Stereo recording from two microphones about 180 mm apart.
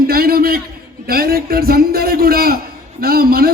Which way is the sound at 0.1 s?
55° right (ahead or behind).